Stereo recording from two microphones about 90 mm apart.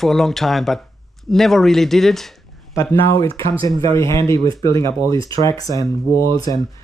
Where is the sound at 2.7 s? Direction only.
30° left (ahead or behind).